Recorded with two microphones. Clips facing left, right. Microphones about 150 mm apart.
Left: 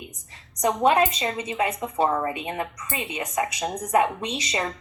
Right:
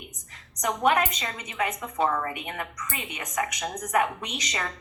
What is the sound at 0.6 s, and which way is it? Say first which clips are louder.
A woman's voice: left 4 dB; 25° left (ahead or behind).